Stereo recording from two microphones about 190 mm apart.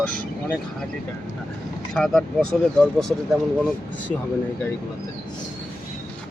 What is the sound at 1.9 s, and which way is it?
Speech, 5° left (ahead or behind).